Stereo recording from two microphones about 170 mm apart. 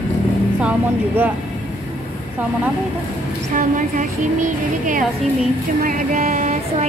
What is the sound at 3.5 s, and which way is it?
Speech, 50° right (ahead or behind).